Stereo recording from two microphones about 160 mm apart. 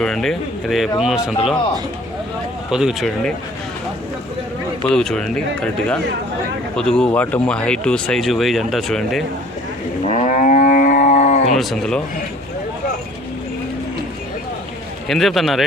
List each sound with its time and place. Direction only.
0.0 s speech: 5° left (ahead or behind)
2.6 s speech: 5° right (ahead or behind)
4.9 s speech: 5° left (ahead or behind)
10.0 s livestock: 45° left (ahead or behind)
11.5 s speech: centre (ahead or behind)
15.0 s speech: centre (ahead or behind)